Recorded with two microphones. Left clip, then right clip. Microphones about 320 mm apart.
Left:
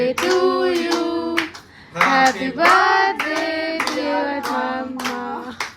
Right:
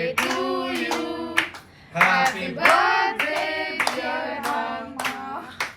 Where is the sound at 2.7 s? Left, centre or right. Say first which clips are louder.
Left 4 dB; left.